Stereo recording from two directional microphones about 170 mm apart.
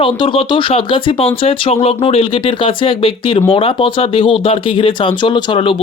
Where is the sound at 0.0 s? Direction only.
30° left (ahead or behind).